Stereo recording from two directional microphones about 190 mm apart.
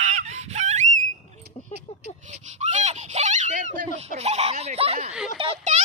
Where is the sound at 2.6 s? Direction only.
40° right (ahead or behind).